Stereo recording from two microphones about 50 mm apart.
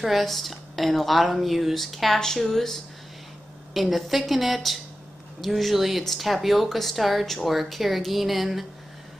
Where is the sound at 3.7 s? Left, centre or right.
Centre.